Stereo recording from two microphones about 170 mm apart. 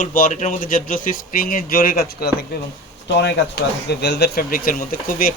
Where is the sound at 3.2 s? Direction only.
80° left.